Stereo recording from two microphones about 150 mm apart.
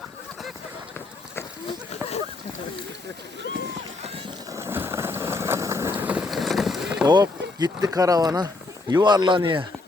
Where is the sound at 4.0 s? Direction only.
40° right (ahead or behind).